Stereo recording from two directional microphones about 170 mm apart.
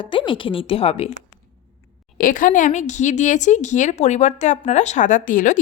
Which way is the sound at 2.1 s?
50° left (ahead or behind).